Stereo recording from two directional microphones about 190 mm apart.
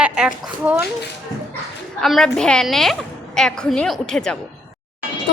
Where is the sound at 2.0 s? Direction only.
Centre (ahead or behind).